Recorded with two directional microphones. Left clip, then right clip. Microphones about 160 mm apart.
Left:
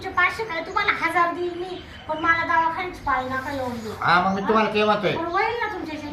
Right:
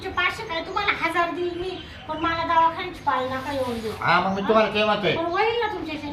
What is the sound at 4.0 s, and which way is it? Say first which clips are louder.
Speech: left 2 dB; 15° right (ahead or behind).